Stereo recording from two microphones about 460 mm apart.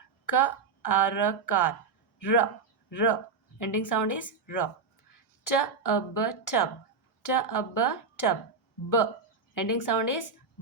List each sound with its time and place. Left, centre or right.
0.3 s a woman's voice: left
9.6 s a woman's voice: left